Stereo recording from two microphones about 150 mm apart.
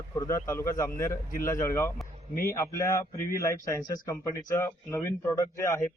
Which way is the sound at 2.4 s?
20° left (ahead or behind).